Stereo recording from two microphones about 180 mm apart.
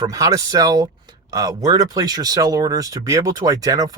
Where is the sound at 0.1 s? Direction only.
20° right (ahead or behind).